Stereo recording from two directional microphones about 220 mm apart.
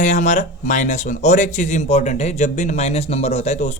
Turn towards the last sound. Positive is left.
turn(degrees=30)  # may be behind; listen again after turning